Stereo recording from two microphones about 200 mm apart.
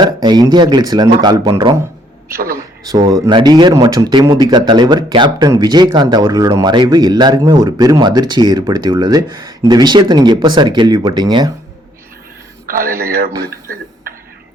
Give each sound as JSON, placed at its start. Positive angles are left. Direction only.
{"t": 0.0, "sound": "speech", "side_deg": -20}
{"t": 2.3, "sound": "speech", "side_deg": -45}
{"t": 2.8, "sound": "speech", "side_deg": -20}
{"t": 12.6, "sound": "a man's voice", "side_deg": -45}